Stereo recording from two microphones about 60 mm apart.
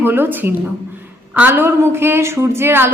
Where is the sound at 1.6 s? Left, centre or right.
Right.